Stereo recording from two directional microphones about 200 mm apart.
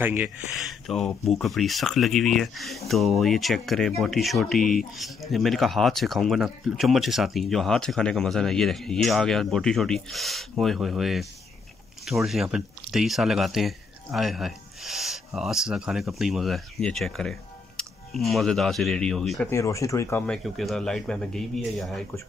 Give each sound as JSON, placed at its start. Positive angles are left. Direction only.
{"t": 0.0, "sound": "speech", "side_deg": -10}
{"t": 19.5, "sound": "speech", "side_deg": 15}